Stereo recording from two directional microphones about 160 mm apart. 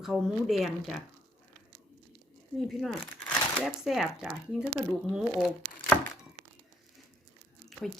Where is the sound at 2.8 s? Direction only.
5° left (ahead or behind).